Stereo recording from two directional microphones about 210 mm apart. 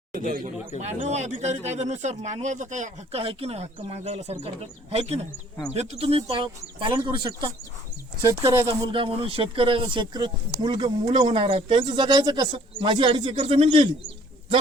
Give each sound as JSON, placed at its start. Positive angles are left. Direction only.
{"t": 0.1, "sound": "speech", "side_deg": -40}
{"t": 8.6, "sound": "speech", "side_deg": -25}